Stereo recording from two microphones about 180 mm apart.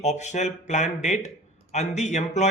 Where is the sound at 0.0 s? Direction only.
40° left (ahead or behind).